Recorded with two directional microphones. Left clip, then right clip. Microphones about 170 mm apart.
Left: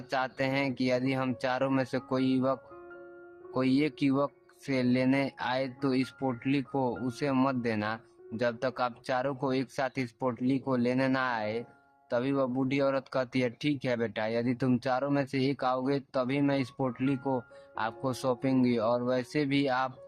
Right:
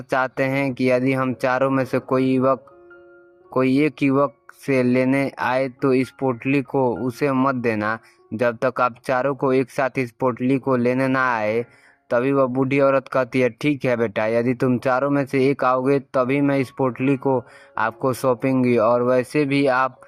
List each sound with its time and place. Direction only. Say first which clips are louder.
0.1 s speech: right 10 dB; 35° right (ahead or behind)